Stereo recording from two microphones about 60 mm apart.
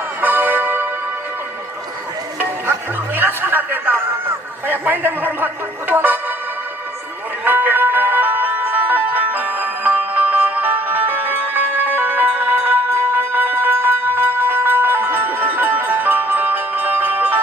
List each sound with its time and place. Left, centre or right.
0.2 s music: right
2.3 s speech: right
7.4 s music: right